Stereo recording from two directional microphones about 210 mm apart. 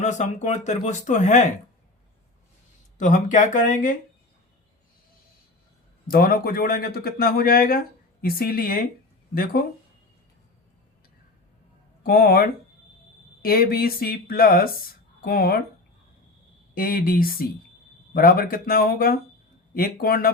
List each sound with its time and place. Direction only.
0.0 s speech: 35° left (ahead or behind)
3.0 s speech: 35° left (ahead or behind)
6.1 s a man's voice: 45° left (ahead or behind)
12.0 s a man's voice: 45° left (ahead or behind)
16.7 s a man's voice: 45° left (ahead or behind)